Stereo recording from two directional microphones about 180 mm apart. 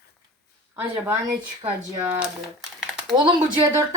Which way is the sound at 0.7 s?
10° right (ahead or behind).